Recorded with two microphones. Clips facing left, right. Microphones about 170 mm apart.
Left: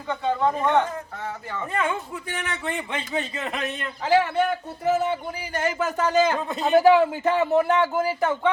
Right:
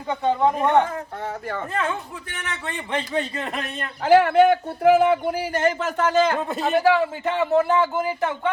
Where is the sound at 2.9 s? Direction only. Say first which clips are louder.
Right 3 dB; 35° right (ahead or behind).